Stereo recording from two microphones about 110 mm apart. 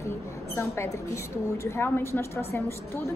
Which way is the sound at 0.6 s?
25° left (ahead or behind).